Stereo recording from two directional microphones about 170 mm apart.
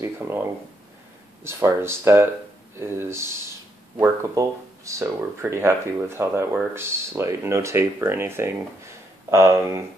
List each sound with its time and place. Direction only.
0.0 s speech: 15° right (ahead or behind)